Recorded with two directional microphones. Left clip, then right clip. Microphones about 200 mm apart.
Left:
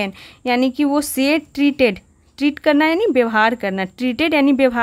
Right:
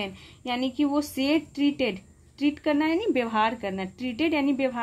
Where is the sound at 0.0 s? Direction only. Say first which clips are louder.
Left 11 dB; 40° left (ahead or behind).